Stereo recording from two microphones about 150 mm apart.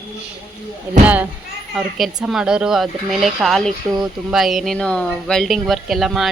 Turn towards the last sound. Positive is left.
turn(degrees=0)  # may be behind; listen again after turning